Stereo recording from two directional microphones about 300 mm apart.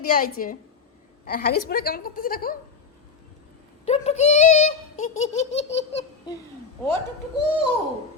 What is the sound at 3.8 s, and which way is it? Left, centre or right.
A woman's voice, left.